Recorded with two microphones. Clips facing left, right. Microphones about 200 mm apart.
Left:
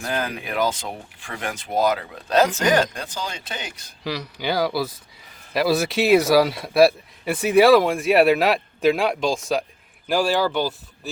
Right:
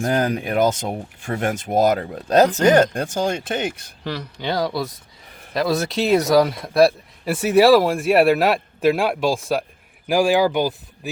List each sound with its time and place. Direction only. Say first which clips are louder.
0.0 s speech: right 7 dB; 40° right (ahead or behind)
4.0 s speech: even; 5° left (ahead or behind)
10.1 s speech: right 4 dB; 15° right (ahead or behind)